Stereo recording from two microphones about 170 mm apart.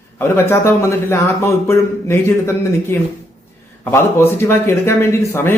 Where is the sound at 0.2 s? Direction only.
15° left (ahead or behind).